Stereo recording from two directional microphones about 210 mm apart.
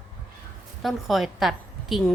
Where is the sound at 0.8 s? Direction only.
Centre (ahead or behind).